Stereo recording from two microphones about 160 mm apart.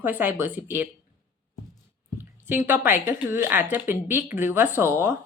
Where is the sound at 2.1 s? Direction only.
10° right (ahead or behind).